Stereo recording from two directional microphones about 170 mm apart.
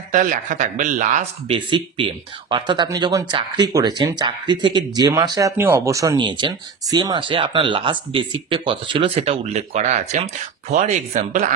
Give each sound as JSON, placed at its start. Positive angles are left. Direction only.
{"t": 0.1, "sound": "speech", "side_deg": -50}
{"t": 1.5, "sound": "speech", "side_deg": -30}